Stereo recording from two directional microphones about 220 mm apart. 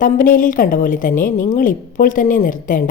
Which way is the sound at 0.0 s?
40° left (ahead or behind).